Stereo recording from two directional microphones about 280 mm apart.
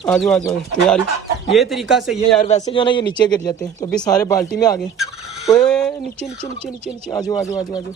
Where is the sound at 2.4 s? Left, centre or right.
Left.